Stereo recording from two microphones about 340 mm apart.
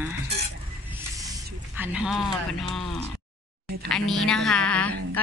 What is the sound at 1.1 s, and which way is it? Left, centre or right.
A woman's voice, centre.